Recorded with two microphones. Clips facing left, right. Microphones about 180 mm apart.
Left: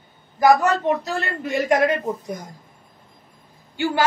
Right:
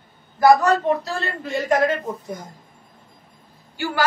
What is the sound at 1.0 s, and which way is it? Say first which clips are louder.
Speech: left 1 dB; 20° left (ahead or behind).